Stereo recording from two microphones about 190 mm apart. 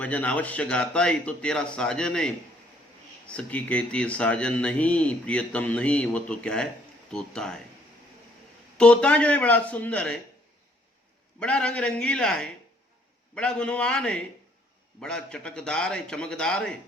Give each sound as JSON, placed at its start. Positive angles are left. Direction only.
{"t": 0.0, "sound": "speech", "side_deg": 5}
{"t": 8.8, "sound": "speech", "side_deg": 5}
{"t": 11.3, "sound": "speech", "side_deg": 5}